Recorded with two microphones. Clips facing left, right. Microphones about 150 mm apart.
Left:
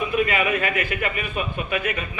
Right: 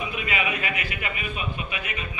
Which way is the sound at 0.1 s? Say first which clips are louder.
Left 7 dB; 50° left (ahead or behind).